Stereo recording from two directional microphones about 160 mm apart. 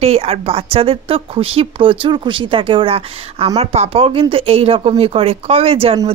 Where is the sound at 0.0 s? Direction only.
40° right (ahead or behind).